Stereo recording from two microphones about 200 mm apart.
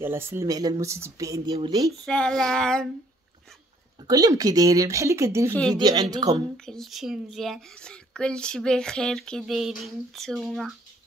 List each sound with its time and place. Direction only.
0.0 s speech: 10° right (ahead or behind)
1.9 s speech: 5° left (ahead or behind)
4.1 s speech: 15° right (ahead or behind)
6.5 s speech: 5° left (ahead or behind)